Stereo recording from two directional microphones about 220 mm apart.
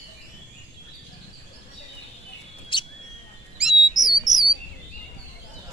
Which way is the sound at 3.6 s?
Centre (ahead or behind).